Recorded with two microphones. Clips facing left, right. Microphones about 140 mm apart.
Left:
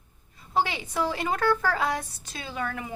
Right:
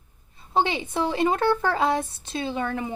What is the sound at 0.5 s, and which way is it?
A woman's voice, 25° right (ahead or behind).